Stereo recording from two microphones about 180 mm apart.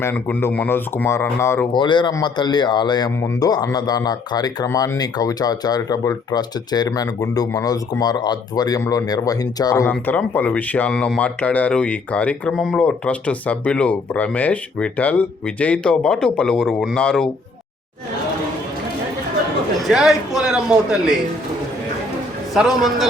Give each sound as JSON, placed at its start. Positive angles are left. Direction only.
{"t": 0.0, "sound": "speech", "side_deg": 10}
{"t": 1.7, "sound": "speech", "side_deg": 25}
{"t": 9.8, "sound": "speech", "side_deg": 10}
{"t": 19.8, "sound": "a man's voice", "side_deg": 0}
{"t": 22.5, "sound": "a man's voice", "side_deg": 0}